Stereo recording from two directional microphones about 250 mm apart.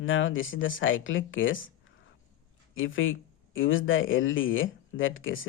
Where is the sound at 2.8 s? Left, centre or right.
Left.